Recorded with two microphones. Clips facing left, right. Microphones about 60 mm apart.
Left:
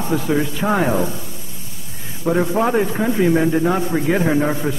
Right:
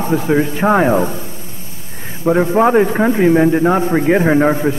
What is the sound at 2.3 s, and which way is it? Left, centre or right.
A man's voice, right.